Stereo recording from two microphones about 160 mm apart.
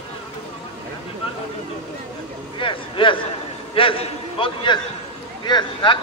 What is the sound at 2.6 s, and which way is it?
A man's voice, 30° left (ahead or behind).